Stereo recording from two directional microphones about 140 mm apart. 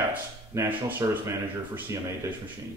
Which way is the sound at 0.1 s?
10° right (ahead or behind).